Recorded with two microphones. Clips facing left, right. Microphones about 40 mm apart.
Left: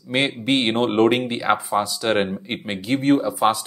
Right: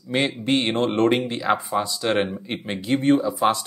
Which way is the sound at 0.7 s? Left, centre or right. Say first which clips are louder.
Left 3 dB; left.